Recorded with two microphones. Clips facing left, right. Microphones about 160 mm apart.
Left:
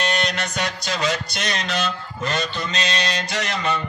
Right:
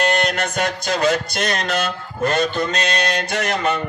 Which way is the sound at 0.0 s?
55° right (ahead or behind).